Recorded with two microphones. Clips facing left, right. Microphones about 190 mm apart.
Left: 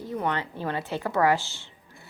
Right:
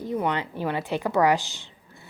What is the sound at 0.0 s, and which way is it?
A woman's voice, 15° right (ahead or behind).